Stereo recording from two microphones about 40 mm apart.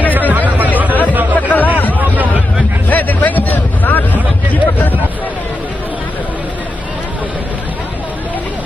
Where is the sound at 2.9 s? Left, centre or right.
Left.